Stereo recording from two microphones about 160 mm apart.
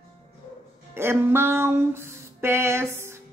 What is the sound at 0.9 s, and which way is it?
Speech, 15° right (ahead or behind).